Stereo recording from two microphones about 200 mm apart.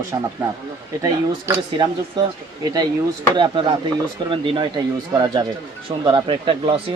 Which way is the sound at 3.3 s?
25° right (ahead or behind).